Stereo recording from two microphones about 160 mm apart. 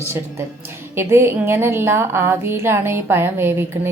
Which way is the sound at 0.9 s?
15° right (ahead or behind).